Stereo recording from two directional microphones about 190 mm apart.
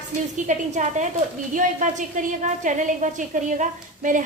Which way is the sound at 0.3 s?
40° right (ahead or behind).